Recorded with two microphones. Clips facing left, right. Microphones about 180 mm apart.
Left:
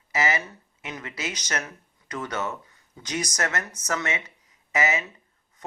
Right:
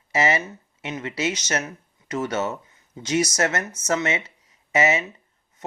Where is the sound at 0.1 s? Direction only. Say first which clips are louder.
Right 4 dB; 30° right (ahead or behind).